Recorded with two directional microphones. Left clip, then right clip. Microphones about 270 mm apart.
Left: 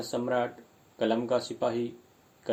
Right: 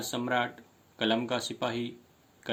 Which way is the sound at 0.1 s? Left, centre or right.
Right.